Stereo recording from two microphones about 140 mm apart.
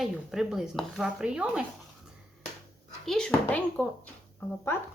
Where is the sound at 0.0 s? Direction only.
Centre (ahead or behind).